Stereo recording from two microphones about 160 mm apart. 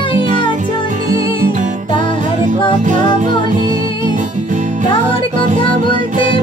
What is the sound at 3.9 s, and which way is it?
Music, 30° left (ahead or behind).